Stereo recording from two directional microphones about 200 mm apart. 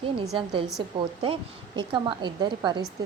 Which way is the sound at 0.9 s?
25° right (ahead or behind).